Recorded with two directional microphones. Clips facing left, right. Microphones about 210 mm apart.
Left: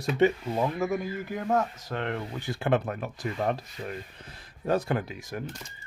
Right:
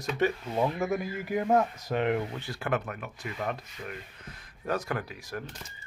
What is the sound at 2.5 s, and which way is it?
Speech, 25° left (ahead or behind).